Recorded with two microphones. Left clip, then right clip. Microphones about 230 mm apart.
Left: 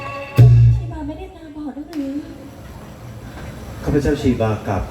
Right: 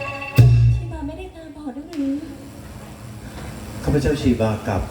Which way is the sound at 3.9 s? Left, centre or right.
Right.